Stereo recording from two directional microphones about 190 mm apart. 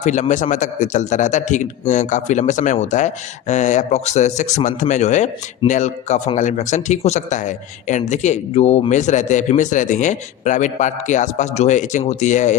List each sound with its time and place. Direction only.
0.0 s a man's voice: 40° left (ahead or behind)